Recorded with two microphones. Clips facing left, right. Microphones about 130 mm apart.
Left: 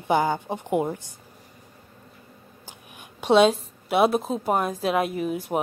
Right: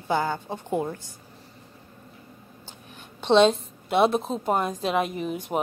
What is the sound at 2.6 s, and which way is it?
A woman's voice, 10° left (ahead or behind).